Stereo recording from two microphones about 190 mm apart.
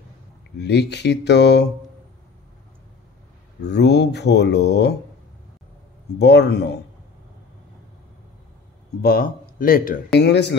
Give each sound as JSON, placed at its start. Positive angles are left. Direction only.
{"t": 0.6, "sound": "speech", "side_deg": 60}
{"t": 3.6, "sound": "speech", "side_deg": 60}
{"t": 6.1, "sound": "speech", "side_deg": 60}
{"t": 9.0, "sound": "speech", "side_deg": 50}
{"t": 10.1, "sound": "speech", "side_deg": 65}